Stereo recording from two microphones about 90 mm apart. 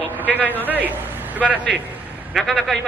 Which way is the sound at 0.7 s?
20° right (ahead or behind).